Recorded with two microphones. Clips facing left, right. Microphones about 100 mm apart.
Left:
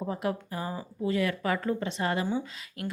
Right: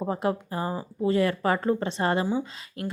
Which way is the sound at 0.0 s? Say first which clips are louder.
Right 4 dB; 30° right (ahead or behind).